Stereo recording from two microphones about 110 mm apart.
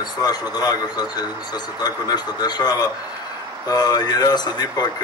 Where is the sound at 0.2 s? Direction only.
35° left (ahead or behind).